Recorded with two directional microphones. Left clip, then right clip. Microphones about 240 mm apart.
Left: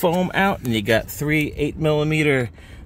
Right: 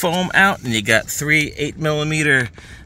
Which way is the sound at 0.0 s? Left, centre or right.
Centre.